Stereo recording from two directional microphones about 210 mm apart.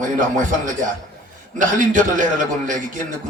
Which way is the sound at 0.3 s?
35° right (ahead or behind).